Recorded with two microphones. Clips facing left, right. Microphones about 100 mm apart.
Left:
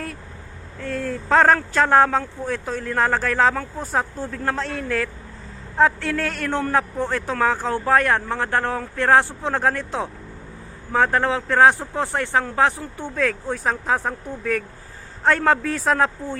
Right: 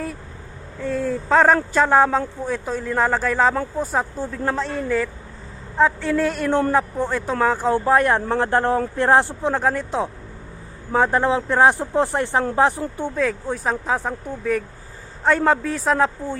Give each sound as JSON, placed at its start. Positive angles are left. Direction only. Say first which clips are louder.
{"t": 0.8, "sound": "a man's voice", "louder": "right 4 dB", "side_deg": -5}
{"t": 9.5, "sound": "speech", "louder": "right 1 dB", "side_deg": -5}
{"t": 10.9, "sound": "a man's voice", "louder": "right 1 dB", "side_deg": -15}
{"t": 13.0, "sound": "speech", "louder": "even", "side_deg": -5}